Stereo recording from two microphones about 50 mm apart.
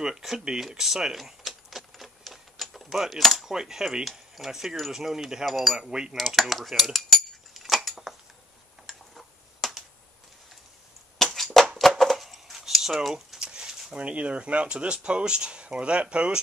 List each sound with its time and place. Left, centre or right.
0.0 s a sound: centre
3.4 s speech: centre
5.4 s speech: centre
5.8 s speech: centre
6.1 s cutlery: centre
8.8 s typing: centre
11.3 s a sound: centre
13.1 s a sound: centre
13.9 s speech: right